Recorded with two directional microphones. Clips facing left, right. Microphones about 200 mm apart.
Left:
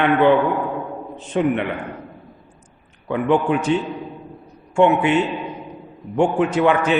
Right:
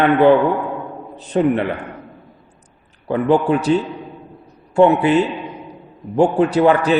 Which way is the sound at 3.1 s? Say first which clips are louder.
Right 3 dB; 35° right (ahead or behind).